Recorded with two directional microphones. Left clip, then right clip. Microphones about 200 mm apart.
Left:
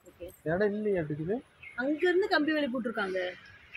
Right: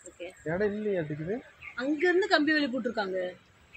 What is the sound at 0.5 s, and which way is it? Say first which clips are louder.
Speech: left 1 dB; 10° left (ahead or behind).